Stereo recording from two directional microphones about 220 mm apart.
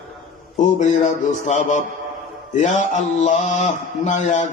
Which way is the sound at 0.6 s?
35° left (ahead or behind).